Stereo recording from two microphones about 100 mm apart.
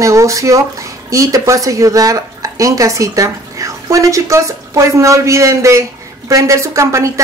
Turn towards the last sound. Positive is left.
turn(degrees=-30)  # may be behind; listen again after turning